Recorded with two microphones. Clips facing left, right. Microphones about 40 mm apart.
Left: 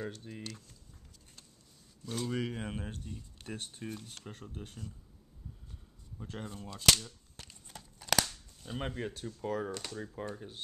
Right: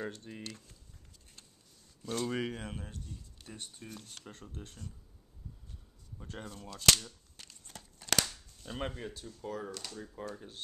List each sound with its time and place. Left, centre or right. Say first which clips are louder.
0.0 s speech: even; centre
2.0 s speech: right 1 dB; centre
2.6 s speech: left 3 dB; left
3.8 s speech: left 5 dB; centre
6.1 s speech: left 2 dB; centre
7.0 s cap gun: left 1 dB; centre
7.4 s crumpling: right 1 dB; centre
8.9 s speech: left 4 dB; left